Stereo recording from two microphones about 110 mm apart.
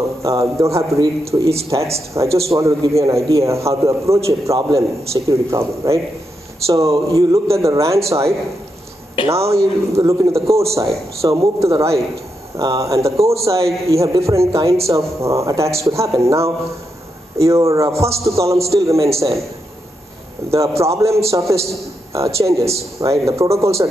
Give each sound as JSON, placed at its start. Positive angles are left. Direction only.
{"t": 0.2, "sound": "a man's voice", "side_deg": -30}
{"t": 9.2, "sound": "speech", "side_deg": 45}
{"t": 9.5, "sound": "a man's voice", "side_deg": -25}
{"t": 20.4, "sound": "a man's voice", "side_deg": -25}